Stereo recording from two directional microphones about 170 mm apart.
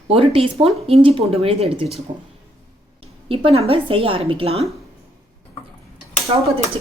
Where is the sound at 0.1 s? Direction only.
35° right (ahead or behind).